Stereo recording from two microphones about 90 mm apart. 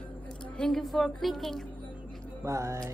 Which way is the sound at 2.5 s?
35° right (ahead or behind).